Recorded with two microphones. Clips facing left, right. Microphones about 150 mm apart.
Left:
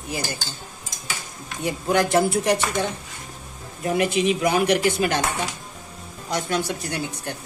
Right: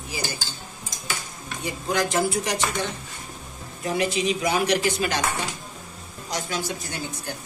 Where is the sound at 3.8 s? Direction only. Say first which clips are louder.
Left 3 dB; 50° left (ahead or behind).